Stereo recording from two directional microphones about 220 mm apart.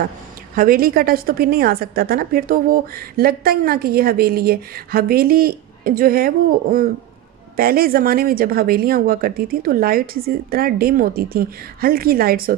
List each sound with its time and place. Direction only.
0.6 s a woman's voice: 40° right (ahead or behind)